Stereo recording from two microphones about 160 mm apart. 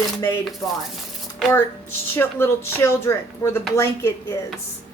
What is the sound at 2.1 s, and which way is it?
Speech, 15° left (ahead or behind).